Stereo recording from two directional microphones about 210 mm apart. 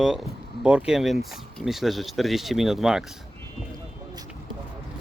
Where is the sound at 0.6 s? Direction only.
5° right (ahead or behind).